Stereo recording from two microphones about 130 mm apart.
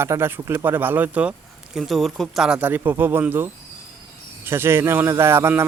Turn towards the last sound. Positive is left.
turn(degrees=-20)  # may be behind; listen again after turning